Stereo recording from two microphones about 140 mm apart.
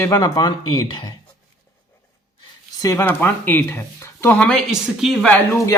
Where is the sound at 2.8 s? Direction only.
20° left (ahead or behind).